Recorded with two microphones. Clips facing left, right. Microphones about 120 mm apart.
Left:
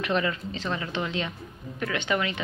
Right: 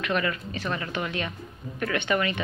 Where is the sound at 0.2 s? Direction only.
20° left (ahead or behind).